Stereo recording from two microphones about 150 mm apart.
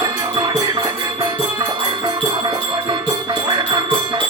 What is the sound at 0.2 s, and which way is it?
Music, 25° right (ahead or behind).